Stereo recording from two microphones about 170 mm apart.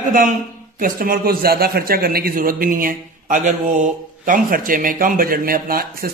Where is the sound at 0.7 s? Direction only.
55° right (ahead or behind).